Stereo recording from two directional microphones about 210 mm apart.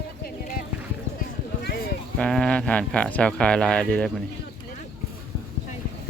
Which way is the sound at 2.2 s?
5° left (ahead or behind).